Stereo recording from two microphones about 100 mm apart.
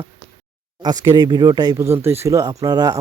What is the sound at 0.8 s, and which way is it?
Speech, 40° right (ahead or behind).